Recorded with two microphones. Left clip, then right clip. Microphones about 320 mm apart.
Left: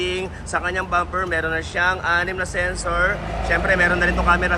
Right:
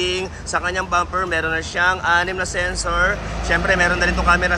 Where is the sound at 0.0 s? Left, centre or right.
Centre.